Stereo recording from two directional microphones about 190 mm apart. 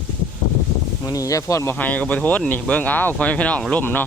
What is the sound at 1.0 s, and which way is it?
Speech, 20° left (ahead or behind).